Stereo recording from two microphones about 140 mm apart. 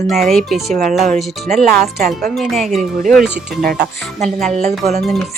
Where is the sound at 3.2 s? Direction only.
90° right.